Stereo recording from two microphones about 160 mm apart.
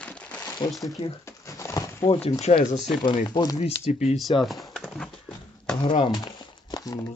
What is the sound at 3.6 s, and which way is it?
Speech, 45° left (ahead or behind).